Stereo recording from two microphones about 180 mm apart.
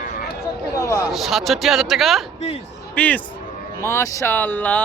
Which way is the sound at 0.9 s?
15° left (ahead or behind).